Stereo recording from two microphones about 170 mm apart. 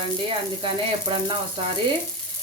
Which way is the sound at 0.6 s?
30° right (ahead or behind).